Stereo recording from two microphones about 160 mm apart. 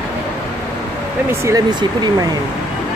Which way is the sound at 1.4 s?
25° right (ahead or behind).